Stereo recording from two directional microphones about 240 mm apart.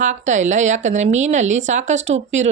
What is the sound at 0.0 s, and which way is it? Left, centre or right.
A woman's voice, right.